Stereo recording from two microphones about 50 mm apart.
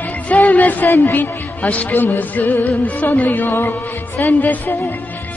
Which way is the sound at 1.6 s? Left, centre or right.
Left.